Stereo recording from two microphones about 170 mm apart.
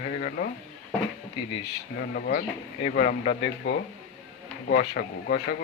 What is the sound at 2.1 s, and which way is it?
Speech, 65° left (ahead or behind).